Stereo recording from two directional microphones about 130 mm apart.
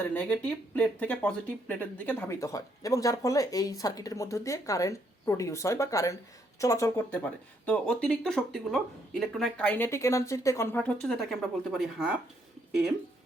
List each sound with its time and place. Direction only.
0.0 s speech: 10° left (ahead or behind)
7.6 s speech: 10° left (ahead or behind)
11.0 s speech: centre (ahead or behind)